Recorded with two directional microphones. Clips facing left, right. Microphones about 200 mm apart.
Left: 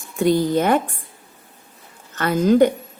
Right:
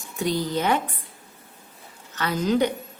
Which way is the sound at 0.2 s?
55° left (ahead or behind).